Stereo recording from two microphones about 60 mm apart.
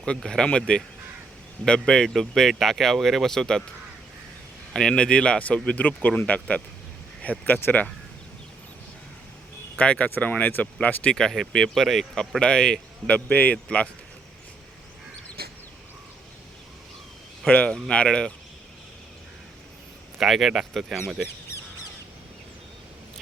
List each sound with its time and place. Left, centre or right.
0.3 s speech: centre
1.9 s speech: centre
4.7 s speech: centre; by 7.9 s left
9.7 s speech: left
11.1 s speech: centre
17.7 s speech: centre
20.1 s speech: centre